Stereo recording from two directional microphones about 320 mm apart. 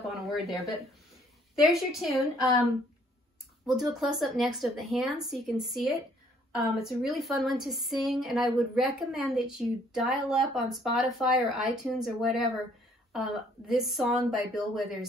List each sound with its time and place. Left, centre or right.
0.0 s a sound: centre
1.5 s a woman's voice: centre
3.6 s a woman's voice: centre